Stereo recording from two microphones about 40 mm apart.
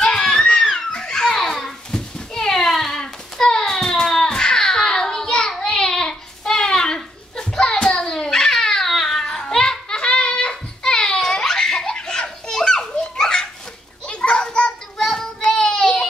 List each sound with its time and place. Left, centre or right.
0.0 s a sound: centre
0.7 s children playing: centre
5.8 s a sound: centre
10.8 s belly laugh: centre
14.0 s children playing: left
15.0 s child singing: centre